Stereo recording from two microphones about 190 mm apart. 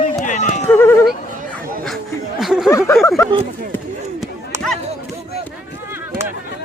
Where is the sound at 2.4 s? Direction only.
Centre (ahead or behind).